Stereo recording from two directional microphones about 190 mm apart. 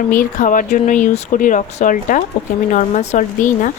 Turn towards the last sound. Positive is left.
turn(degrees=40)  # may be behind; listen again after turning